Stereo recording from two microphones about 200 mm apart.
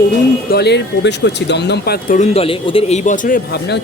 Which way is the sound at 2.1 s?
30° left (ahead or behind).